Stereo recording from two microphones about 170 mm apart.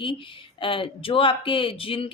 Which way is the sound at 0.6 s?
30° left (ahead or behind).